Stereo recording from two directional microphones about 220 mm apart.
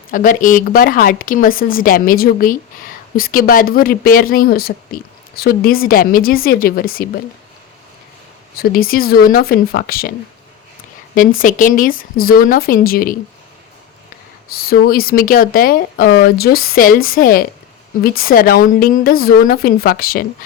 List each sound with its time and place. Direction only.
0.1 s a woman's voice: 40° left (ahead or behind)
8.5 s a woman's voice: 40° left (ahead or behind)
11.3 s a woman's voice: 35° left (ahead or behind)
14.5 s a woman's voice: 45° left (ahead or behind)